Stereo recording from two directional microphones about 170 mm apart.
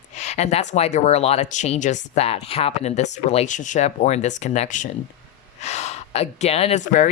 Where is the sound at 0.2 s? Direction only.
40° left (ahead or behind).